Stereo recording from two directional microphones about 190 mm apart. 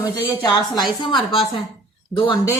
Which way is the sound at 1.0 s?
25° left (ahead or behind).